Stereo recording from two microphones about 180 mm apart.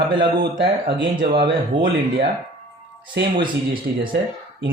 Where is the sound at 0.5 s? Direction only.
70° right (ahead or behind).